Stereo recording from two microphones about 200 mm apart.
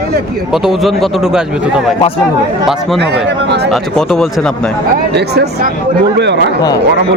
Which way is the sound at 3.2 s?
60° right (ahead or behind).